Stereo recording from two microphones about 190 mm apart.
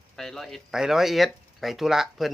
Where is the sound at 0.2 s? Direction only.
Centre (ahead or behind).